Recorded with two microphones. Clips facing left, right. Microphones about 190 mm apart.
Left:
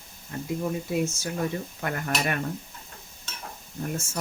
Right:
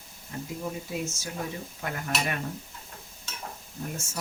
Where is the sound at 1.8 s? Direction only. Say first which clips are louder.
Left 2 dB; 55° left (ahead or behind).